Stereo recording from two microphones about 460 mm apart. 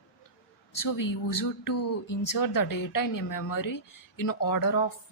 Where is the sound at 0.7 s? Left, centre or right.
Left.